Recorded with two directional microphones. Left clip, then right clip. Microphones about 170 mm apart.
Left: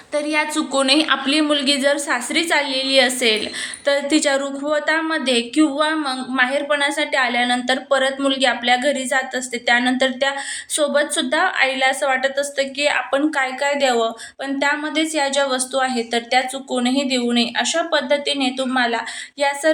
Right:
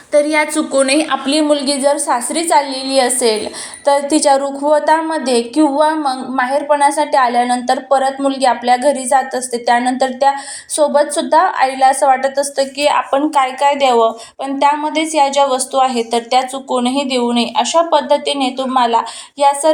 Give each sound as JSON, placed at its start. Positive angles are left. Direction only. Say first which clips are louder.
{"t": 0.1, "sound": "a woman's voice", "louder": "right 7 dB", "side_deg": -20}
{"t": 0.7, "sound": "a woman's voice", "louder": "right 1 dB", "side_deg": -10}